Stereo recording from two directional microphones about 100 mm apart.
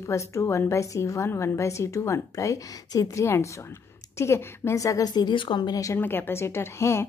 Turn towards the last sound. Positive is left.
turn(degrees=25)  # may be behind; listen again after turning